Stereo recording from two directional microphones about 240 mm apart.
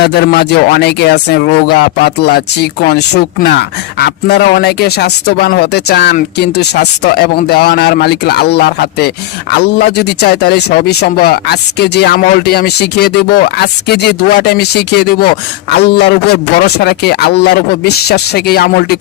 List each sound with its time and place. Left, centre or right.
0.0 s speech: left